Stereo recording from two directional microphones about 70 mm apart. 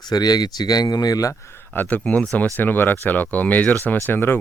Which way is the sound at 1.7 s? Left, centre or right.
Left.